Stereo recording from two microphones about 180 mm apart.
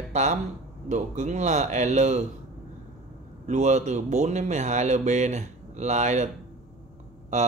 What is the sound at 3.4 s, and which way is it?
Speech, 40° right (ahead or behind).